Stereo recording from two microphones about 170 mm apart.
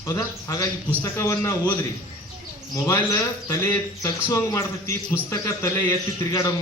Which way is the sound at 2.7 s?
20° left (ahead or behind).